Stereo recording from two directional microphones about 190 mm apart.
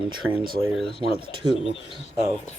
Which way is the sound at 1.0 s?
25° right (ahead or behind).